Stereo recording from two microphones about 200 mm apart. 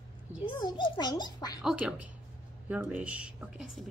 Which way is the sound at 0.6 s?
20° left (ahead or behind).